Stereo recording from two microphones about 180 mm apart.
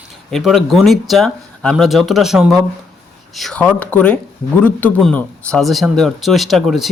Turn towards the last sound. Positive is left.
turn(degrees=0)  # may be behind; listen again after turning